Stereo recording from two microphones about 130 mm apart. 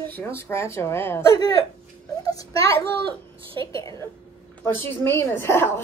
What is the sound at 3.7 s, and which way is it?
A woman's voice, 25° left (ahead or behind).